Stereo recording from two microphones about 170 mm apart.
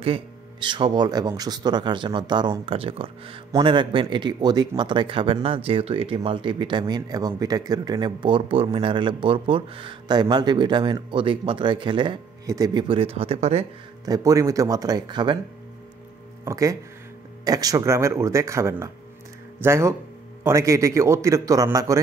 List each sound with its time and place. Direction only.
0.0 s speech: 30° right (ahead or behind)
14.0 s speech: 20° right (ahead or behind)
16.4 s a man's voice: 20° right (ahead or behind)